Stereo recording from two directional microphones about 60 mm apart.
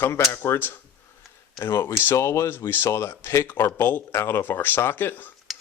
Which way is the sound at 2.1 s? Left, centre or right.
Left.